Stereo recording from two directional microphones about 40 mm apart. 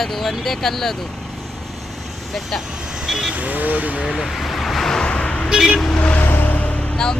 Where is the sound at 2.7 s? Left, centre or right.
Right.